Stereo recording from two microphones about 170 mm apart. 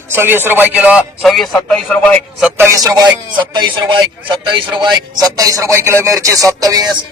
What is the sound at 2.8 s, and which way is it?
A man's voice, 25° right (ahead or behind).